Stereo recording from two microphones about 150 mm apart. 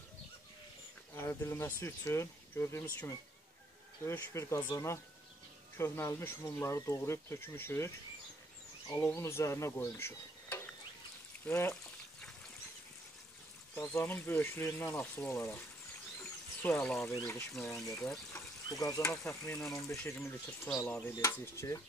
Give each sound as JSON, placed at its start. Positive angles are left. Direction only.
{"t": 1.1, "sound": "speech", "side_deg": 15}
{"t": 8.8, "sound": "stir", "side_deg": 20}
{"t": 11.4, "sound": "speech", "side_deg": 15}
{"t": 13.9, "sound": "speech", "side_deg": 15}
{"t": 16.6, "sound": "speech", "side_deg": 15}